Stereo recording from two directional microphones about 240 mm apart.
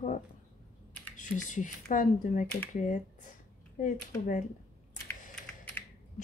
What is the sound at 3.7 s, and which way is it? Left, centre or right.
Speech, left.